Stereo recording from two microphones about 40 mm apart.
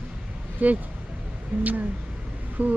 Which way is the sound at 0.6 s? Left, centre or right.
Right.